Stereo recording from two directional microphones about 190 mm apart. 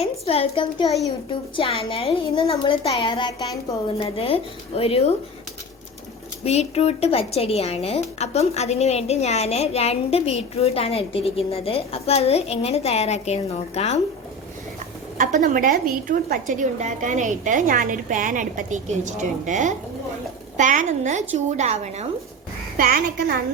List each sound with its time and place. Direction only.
0.0 s a woman's voice: 30° left (ahead or behind)
6.4 s a woman's voice: 35° left (ahead or behind)
15.2 s a woman's voice: 45° right (ahead or behind)